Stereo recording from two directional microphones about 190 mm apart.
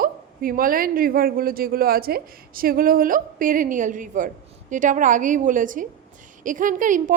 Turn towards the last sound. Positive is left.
turn(degrees=-40)  # may be behind; listen again after turning